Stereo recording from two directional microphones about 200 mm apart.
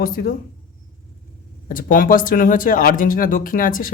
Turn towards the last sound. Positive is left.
turn(degrees=45)  # may be behind; listen again after turning